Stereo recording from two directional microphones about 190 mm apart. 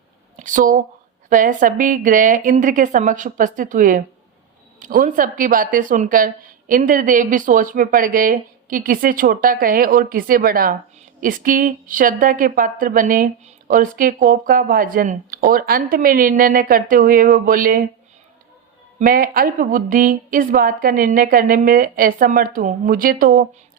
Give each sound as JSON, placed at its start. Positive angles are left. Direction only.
{"t": 0.3, "sound": "speech", "side_deg": -45}
{"t": 18.9, "sound": "speech", "side_deg": -50}